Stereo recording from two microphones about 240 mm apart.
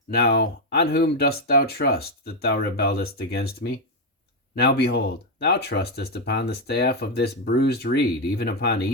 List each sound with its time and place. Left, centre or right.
0.1 s speech: left